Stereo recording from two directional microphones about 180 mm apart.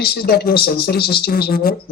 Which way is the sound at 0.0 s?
60° left (ahead or behind).